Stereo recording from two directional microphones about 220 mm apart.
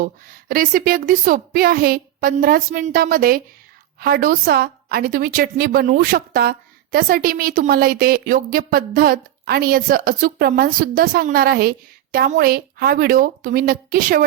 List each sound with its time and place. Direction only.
0.0 s a woman's voice: 40° right (ahead or behind)